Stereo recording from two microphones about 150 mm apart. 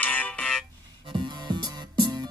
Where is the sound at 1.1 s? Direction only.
30° right (ahead or behind).